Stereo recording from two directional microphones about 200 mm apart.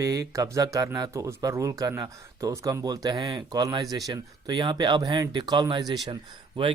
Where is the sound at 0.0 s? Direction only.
15° right (ahead or behind).